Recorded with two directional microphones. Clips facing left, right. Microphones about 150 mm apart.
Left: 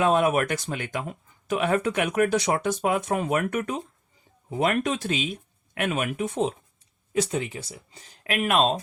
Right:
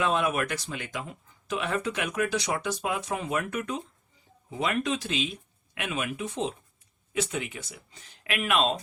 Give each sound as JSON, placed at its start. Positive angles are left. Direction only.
{"t": 0.0, "sound": "speech", "side_deg": 45}
{"t": 7.1, "sound": "speech", "side_deg": 35}